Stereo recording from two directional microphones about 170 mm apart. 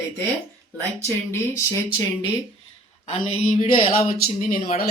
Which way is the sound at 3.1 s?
35° left (ahead or behind).